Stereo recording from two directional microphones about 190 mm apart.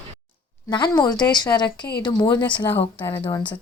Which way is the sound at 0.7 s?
20° left (ahead or behind).